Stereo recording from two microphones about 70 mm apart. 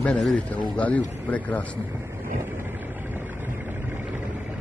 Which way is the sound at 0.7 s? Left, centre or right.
Left.